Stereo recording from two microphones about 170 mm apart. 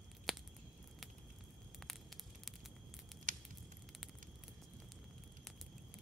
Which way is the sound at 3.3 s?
50° right (ahead or behind).